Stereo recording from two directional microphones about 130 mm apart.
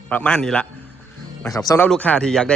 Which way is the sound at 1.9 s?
10° left (ahead or behind).